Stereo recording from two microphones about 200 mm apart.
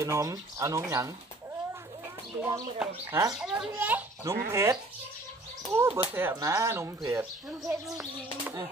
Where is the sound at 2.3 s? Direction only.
10° right (ahead or behind).